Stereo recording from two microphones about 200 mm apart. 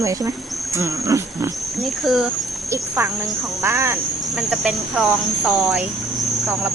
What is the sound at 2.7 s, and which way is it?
Speech, 10° right (ahead or behind).